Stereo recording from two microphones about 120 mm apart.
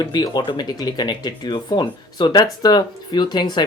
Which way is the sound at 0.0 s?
35° left (ahead or behind).